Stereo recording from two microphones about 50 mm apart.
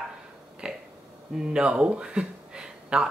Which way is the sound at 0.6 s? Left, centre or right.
Centre.